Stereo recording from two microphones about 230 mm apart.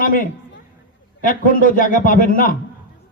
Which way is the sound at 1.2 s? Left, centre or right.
Left.